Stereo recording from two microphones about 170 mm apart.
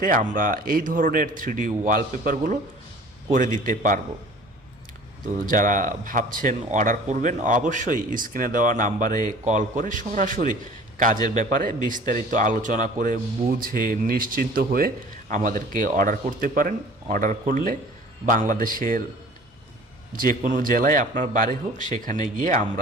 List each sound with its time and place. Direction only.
0.0 s speech: 55° right (ahead or behind)
5.5 s a man's voice: 50° right (ahead or behind)
20.1 s speech: 55° right (ahead or behind)